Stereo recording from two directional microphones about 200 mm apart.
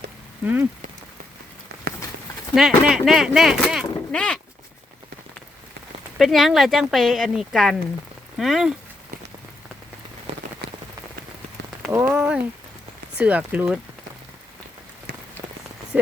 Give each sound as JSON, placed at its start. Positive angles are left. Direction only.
{"t": 0.4, "sound": "speech", "side_deg": -10}
{"t": 2.6, "sound": "speech", "side_deg": 0}
{"t": 3.8, "sound": "a sound", "side_deg": 5}
{"t": 6.1, "sound": "speech", "side_deg": 0}
{"t": 10.3, "sound": "rain on surface", "side_deg": -30}
{"t": 11.9, "sound": "speech", "side_deg": -10}
{"t": 15.1, "sound": "rain on surface", "side_deg": -45}